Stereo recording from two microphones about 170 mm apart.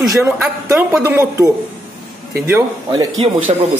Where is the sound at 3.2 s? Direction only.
35° right (ahead or behind).